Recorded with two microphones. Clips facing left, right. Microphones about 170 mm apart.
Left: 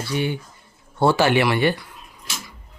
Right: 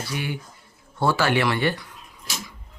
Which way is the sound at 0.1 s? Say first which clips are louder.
Left 10 dB; 25° left (ahead or behind).